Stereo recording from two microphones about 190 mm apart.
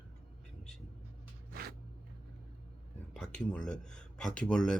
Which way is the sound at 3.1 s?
5° left (ahead or behind).